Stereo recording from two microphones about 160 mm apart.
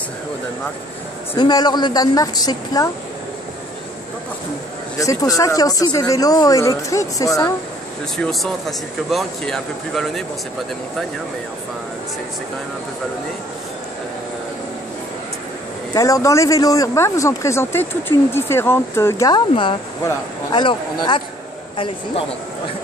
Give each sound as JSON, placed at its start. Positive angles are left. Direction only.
{"t": 1.3, "sound": "speech", "side_deg": 25}
{"t": 4.9, "sound": "speech", "side_deg": 20}
{"t": 8.2, "sound": "speech", "side_deg": 0}
{"t": 15.9, "sound": "speech", "side_deg": 20}
{"t": 20.0, "sound": "a man's voice", "side_deg": 20}